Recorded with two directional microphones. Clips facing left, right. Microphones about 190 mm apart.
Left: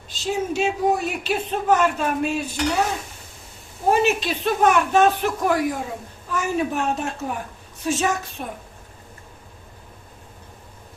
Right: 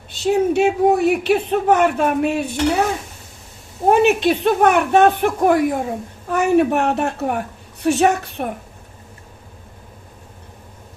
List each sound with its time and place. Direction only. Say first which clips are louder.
0.1 s speech: right 8 dB; 60° right (ahead or behind)
3.8 s speech: right 6 dB; 60° right (ahead or behind)